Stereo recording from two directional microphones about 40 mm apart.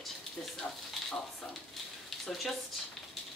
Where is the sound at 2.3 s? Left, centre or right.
Centre.